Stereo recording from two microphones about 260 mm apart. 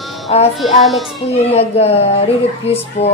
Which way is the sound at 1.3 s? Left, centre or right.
Left.